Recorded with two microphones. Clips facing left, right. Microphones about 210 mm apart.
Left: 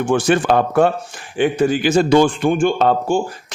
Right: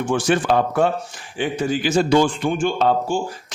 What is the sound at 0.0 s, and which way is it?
A man's voice, 60° left (ahead or behind).